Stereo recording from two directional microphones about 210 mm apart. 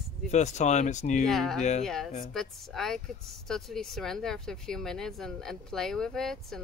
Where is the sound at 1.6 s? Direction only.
35° left (ahead or behind).